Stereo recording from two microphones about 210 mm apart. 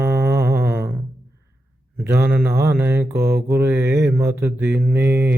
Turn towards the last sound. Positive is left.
turn(degrees=-10)  # may be behind; listen again after turning